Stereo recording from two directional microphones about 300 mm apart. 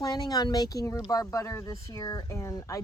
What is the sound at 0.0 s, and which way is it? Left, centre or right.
Speech, centre.